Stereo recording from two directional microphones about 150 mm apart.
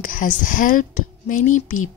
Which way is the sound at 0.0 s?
65° left (ahead or behind).